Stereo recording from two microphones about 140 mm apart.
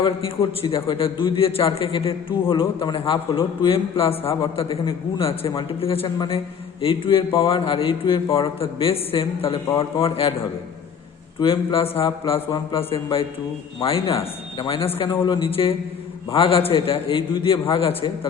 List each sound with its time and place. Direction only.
0.9 s a man's voice: 40° left (ahead or behind)
11.3 s a man's voice: 40° left (ahead or behind)